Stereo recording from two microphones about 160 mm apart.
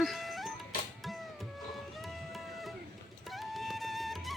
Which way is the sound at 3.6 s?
Centre (ahead or behind).